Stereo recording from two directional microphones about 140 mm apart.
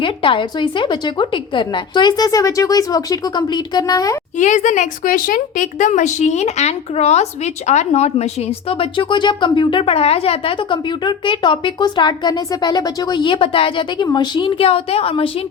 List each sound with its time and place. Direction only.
0.0 s a woman's voice: 40° left (ahead or behind)
4.4 s a woman's voice: 60° left (ahead or behind); by 15.3 s 40° left (ahead or behind)